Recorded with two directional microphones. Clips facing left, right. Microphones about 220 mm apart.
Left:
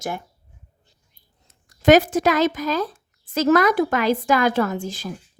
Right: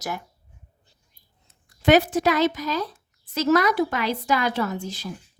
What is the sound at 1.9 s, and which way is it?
A woman's voice, 45° left (ahead or behind).